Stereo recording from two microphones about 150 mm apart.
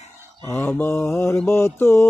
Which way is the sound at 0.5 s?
15° left (ahead or behind).